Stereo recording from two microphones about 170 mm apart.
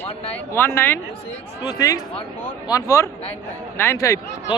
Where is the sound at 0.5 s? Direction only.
15° left (ahead or behind).